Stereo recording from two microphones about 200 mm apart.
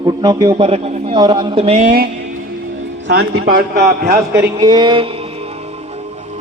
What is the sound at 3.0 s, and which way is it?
Speech, 50° right (ahead or behind).